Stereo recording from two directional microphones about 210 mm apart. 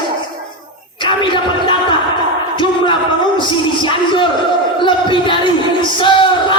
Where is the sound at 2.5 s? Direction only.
25° left (ahead or behind).